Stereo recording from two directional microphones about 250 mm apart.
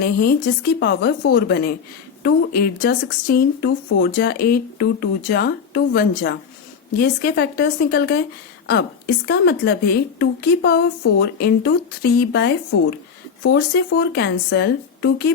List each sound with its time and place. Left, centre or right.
0.0 s speech: left
9.2 s speech: left